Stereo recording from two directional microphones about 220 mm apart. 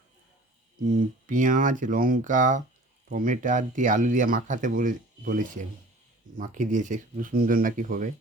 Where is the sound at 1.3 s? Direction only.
35° right (ahead or behind).